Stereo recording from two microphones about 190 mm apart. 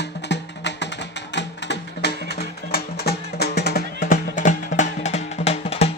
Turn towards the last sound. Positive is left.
turn(degrees=30)  # may be behind; listen again after turning